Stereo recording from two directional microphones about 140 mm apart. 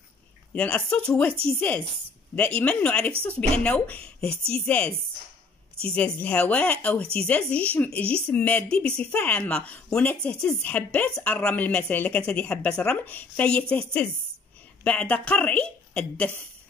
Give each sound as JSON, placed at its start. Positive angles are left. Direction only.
{"t": 0.6, "sound": "speech", "side_deg": 10}
{"t": 2.3, "sound": "speech", "side_deg": 10}
{"t": 5.9, "sound": "speech", "side_deg": 10}